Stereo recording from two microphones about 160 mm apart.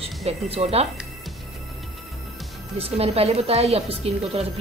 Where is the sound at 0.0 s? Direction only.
40° right (ahead or behind).